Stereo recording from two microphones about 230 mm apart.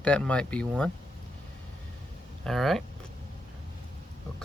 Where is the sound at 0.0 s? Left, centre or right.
Centre.